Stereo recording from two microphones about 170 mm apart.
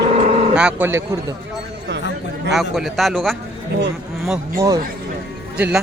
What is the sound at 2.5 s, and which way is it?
Speech, centre (ahead or behind).